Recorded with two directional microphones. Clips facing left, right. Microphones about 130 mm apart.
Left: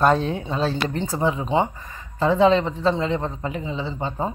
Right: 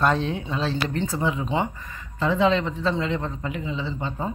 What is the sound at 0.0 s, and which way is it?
Speech, 40° left (ahead or behind).